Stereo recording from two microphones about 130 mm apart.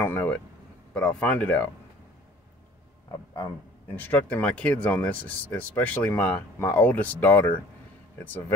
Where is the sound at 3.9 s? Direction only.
15° left (ahead or behind).